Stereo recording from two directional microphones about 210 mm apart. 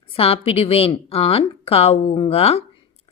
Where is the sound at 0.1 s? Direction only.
25° left (ahead or behind).